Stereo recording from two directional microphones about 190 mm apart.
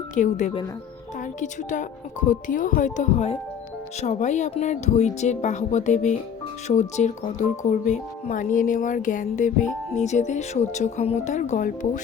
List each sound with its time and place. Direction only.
0.1 s speech: 40° left (ahead or behind)